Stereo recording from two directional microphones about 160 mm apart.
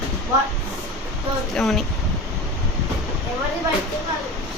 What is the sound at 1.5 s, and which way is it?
Speech, centre (ahead or behind).